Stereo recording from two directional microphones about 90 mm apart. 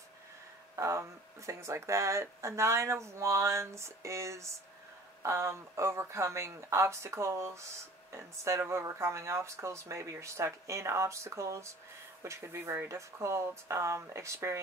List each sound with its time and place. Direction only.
0.7 s speech: 35° right (ahead or behind)